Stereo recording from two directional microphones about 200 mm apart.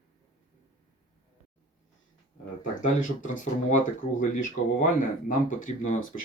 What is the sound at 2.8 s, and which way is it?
Speech, 40° left (ahead or behind).